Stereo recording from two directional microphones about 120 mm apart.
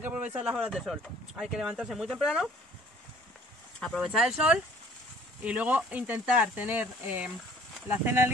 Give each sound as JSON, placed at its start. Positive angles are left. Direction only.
{"t": 0.0, "sound": "speech", "side_deg": -15}
{"t": 3.8, "sound": "speech", "side_deg": 0}